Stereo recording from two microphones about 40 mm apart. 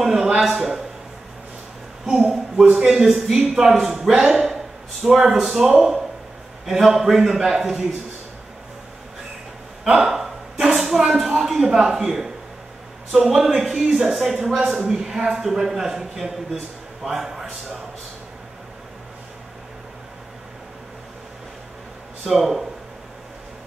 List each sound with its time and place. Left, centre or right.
0.0 s a sound: centre
2.0 s speech: centre
9.8 s speech: centre
14.6 s speech: centre
14.9 s a man's voice: centre
22.3 s speech: centre